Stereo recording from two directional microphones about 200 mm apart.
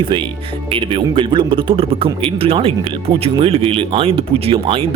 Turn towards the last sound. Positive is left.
turn(degrees=-25)  # may be behind; listen again after turning